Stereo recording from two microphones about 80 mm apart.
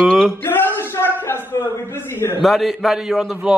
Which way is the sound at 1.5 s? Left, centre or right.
Left.